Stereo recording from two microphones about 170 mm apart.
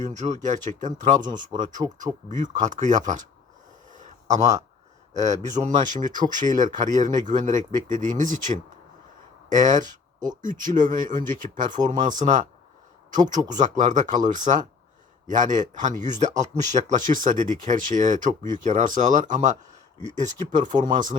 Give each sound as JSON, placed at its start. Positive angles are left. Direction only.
{"t": 0.0, "sound": "speech", "side_deg": -45}
{"t": 3.9, "sound": "a sound", "side_deg": -45}
{"t": 5.1, "sound": "speech", "side_deg": -45}
{"t": 9.6, "sound": "speech", "side_deg": -45}
{"t": 13.5, "sound": "speech", "side_deg": -45}